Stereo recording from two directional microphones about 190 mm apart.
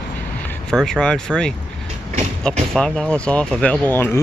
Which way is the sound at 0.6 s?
5° left (ahead or behind).